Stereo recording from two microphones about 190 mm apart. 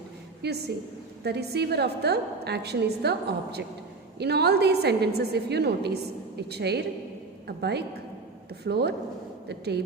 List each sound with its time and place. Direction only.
0.4 s a woman's voice: 60° right (ahead or behind)